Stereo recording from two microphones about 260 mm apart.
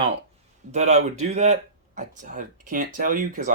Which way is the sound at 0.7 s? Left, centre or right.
Right.